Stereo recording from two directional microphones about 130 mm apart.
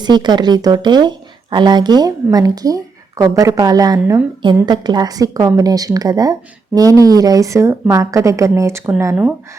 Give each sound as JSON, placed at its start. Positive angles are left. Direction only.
{"t": 0.0, "sound": "speech", "side_deg": -35}